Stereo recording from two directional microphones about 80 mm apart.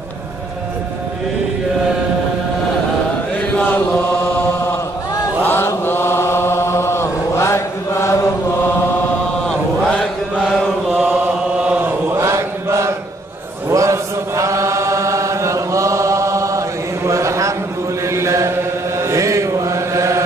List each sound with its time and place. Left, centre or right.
5.4 s chant: left
12.2 s chant: right